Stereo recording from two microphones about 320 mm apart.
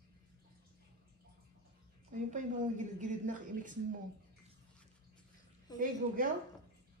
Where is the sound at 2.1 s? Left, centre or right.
Right.